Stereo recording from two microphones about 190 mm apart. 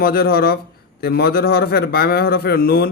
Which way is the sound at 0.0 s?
50° left (ahead or behind).